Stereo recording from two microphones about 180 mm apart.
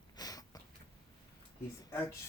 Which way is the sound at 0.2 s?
20° left (ahead or behind).